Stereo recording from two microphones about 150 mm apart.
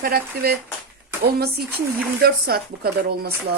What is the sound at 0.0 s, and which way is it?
Speech, 90° right.